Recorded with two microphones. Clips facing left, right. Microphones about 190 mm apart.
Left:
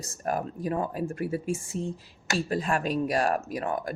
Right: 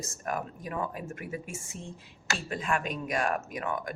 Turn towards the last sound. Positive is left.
turn(degrees=35)  # may be behind; listen again after turning